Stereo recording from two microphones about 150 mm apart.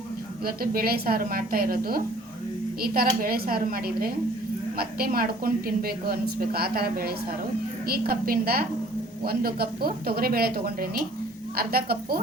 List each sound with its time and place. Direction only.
0.4 s a woman's voice: 80° right